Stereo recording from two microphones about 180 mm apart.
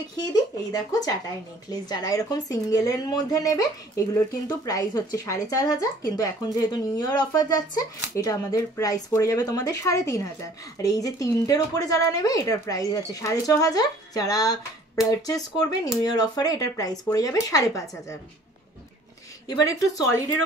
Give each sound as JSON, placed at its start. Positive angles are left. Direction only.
{"t": 0.1, "sound": "speech", "side_deg": 20}
{"t": 19.4, "sound": "speech", "side_deg": 20}